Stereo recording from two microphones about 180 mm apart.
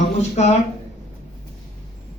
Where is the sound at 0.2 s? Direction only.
40° left (ahead or behind).